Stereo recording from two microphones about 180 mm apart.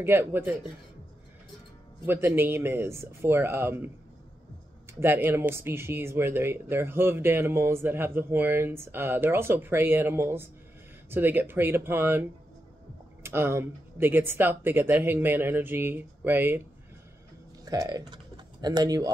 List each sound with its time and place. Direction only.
0.0 s speech: 15° right (ahead or behind)
2.0 s speech: 15° right (ahead or behind)
5.0 s speech: 10° right (ahead or behind)
17.6 s speech: 20° right (ahead or behind)